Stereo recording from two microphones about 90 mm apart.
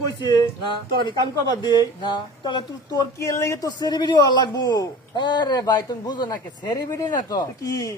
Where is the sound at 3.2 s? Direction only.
35° left (ahead or behind).